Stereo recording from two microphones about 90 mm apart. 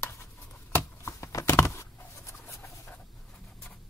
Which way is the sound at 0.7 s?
30° left (ahead or behind).